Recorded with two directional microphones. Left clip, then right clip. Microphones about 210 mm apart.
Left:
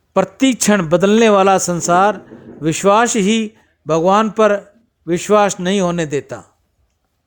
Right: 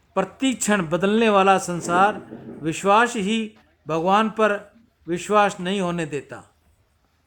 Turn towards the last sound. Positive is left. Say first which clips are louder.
# left 8 dB
turn(degrees=30)  # may be behind; listen again after turning